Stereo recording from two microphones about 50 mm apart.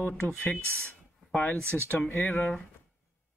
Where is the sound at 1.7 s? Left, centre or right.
Centre.